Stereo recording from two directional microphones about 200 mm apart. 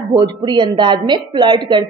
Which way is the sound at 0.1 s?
20° right (ahead or behind).